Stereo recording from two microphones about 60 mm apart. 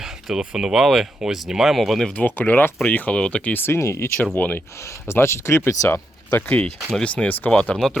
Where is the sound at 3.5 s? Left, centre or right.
Left.